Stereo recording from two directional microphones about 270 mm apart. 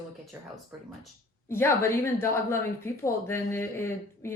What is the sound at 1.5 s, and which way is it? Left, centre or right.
Speech, centre.